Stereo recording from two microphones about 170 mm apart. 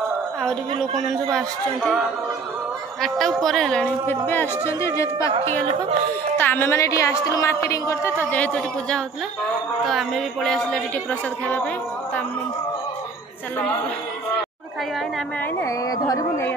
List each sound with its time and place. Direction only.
1.3 s a woman's voice: centre (ahead or behind); by 5.3 s 15° left (ahead or behind)
5.3 s speech: 35° right (ahead or behind)
6.3 s a woman's voice: 10° left (ahead or behind)
15.6 s speech: 20° left (ahead or behind)